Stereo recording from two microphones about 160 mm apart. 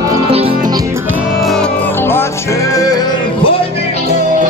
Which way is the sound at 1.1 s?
Centre (ahead or behind).